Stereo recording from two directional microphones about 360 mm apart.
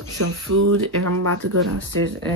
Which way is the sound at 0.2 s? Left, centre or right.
Right.